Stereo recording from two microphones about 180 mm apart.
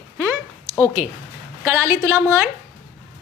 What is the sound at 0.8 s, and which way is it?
A woman's voice, 15° right (ahead or behind).